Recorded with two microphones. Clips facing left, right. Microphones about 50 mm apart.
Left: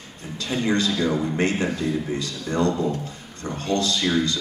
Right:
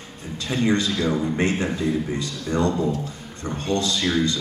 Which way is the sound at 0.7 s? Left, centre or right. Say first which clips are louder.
Even; right.